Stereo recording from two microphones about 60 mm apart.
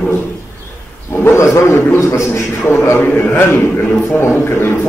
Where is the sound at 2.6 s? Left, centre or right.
Left.